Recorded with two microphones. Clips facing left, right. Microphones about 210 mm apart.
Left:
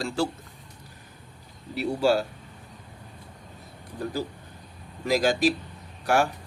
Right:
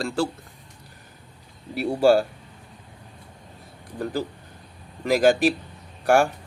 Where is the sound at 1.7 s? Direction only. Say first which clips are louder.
Right 5 dB; 50° right (ahead or behind).